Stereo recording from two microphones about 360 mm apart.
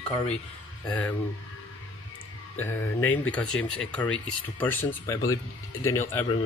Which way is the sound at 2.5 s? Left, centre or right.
Centre.